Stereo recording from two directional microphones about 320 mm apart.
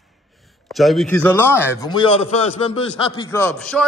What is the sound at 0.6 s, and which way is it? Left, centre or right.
A man's voice, centre.